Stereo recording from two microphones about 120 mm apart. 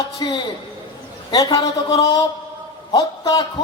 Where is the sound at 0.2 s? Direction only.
35° left (ahead or behind).